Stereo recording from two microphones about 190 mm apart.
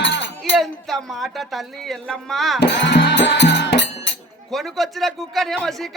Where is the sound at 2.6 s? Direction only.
65° left (ahead or behind).